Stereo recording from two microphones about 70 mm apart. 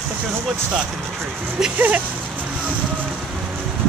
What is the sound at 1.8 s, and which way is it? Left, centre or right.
Speech, right.